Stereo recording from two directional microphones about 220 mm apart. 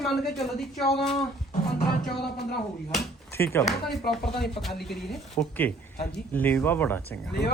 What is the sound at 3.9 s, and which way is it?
Speech, 45° left (ahead or behind).